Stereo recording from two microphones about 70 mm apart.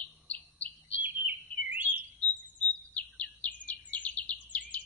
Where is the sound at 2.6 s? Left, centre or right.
Left.